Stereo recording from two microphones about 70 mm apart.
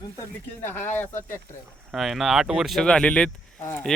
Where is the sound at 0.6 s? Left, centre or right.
Left.